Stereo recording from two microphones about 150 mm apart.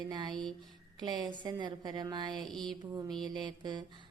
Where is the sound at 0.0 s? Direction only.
30° right (ahead or behind).